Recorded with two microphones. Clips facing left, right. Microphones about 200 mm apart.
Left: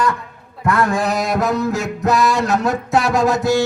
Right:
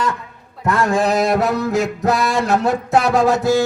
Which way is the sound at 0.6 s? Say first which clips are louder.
Even; 25° right (ahead or behind).